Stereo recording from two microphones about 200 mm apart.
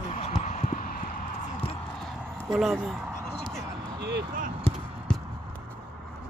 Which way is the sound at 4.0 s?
55° right (ahead or behind).